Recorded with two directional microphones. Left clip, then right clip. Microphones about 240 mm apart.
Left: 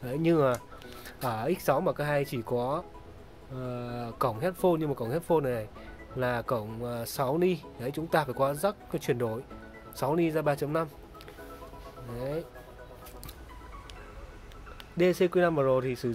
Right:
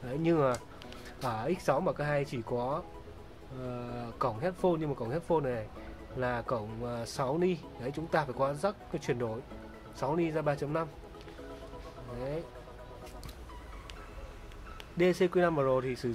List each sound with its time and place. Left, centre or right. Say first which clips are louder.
0.0 s speech: left 3 dB; left
15.0 s speech: left 3 dB; centre